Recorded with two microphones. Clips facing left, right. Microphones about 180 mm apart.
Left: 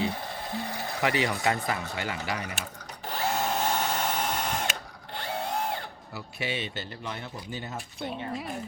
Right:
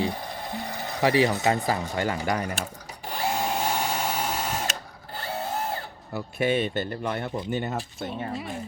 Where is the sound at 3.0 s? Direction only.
10° right (ahead or behind).